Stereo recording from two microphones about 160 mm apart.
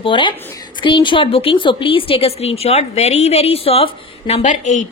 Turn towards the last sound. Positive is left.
turn(degrees=50)  # may be behind; listen again after turning